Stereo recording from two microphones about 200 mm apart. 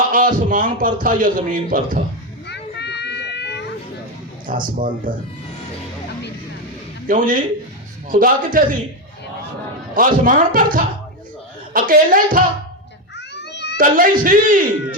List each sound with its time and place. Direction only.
0.1 s a man's voice: 45° right (ahead or behind)
2.5 s a sound: 60° left (ahead or behind)
4.6 s a man's voice: 45° right (ahead or behind)
7.1 s a man's voice: 45° right (ahead or behind)
9.9 s a man's voice: 45° right (ahead or behind)
13.1 s babbling: 60° left (ahead or behind)
13.7 s a man's voice: 45° right (ahead or behind)